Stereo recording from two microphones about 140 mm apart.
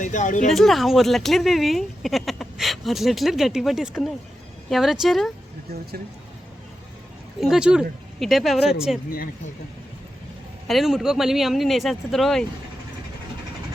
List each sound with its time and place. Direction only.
0.0 s speech: 65° left (ahead or behind)
0.5 s speech: centre (ahead or behind)
7.4 s speech: 5° right (ahead or behind)
9.0 s speech: 90° left
10.7 s speech: centre (ahead or behind)